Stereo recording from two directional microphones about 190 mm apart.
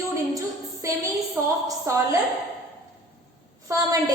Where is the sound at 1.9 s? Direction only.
15° right (ahead or behind).